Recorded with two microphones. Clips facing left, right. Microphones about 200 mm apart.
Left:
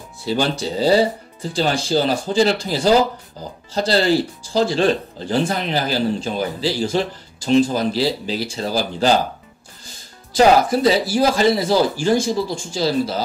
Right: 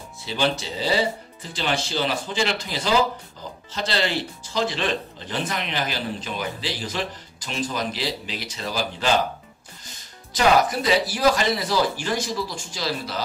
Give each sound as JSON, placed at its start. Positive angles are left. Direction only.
{"t": 0.3, "sound": "speech", "side_deg": 40}
{"t": 10.3, "sound": "speech", "side_deg": 30}